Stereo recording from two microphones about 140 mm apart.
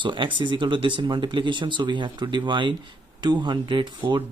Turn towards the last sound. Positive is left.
turn(degrees=-35)  # may be behind; listen again after turning